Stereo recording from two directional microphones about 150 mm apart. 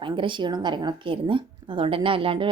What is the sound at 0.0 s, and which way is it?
Speech, 35° right (ahead or behind).